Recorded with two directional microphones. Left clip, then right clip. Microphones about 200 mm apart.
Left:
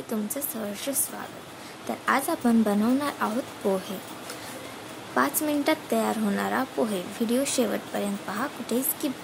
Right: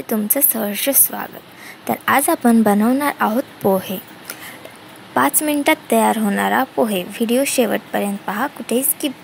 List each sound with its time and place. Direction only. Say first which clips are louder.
0.1 s a woman's voice: right 12 dB; 35° right (ahead or behind)
5.1 s speech: right 8 dB; 25° right (ahead or behind)